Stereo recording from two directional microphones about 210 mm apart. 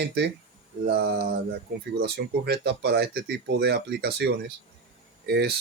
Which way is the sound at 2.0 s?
50° right (ahead or behind).